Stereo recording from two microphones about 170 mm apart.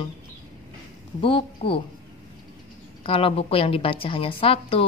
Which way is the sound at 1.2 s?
30° left (ahead or behind).